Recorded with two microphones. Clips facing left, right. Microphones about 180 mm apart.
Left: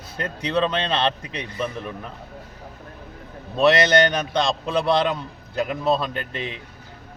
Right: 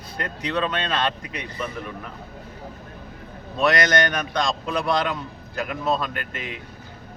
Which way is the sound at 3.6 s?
25° left (ahead or behind).